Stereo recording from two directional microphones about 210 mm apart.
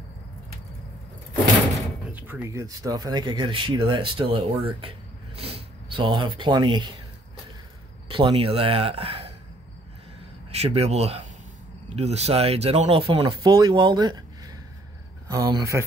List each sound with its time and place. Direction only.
2.1 s speech: 10° right (ahead or behind)
8.1 s speech: 25° right (ahead or behind)
10.5 s a man's voice: 30° right (ahead or behind)